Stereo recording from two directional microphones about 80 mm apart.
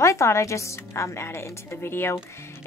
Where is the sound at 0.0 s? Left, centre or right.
Left.